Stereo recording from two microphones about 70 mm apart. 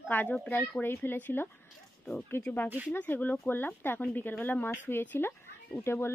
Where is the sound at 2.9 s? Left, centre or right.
Left.